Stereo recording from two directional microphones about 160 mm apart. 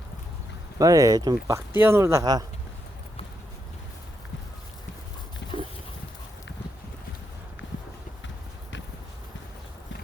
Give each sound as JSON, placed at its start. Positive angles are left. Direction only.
{"t": 0.8, "sound": "speech", "side_deg": -20}